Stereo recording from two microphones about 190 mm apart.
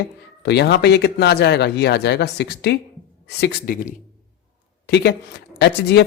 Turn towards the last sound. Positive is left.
turn(degrees=65)  # may be behind; listen again after turning